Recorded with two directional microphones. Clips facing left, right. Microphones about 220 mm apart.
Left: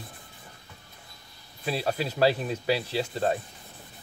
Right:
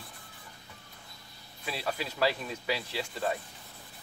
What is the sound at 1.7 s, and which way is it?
Speech, 30° left (ahead or behind).